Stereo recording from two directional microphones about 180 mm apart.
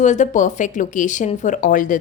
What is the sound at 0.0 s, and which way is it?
A woman's voice, 40° left (ahead or behind).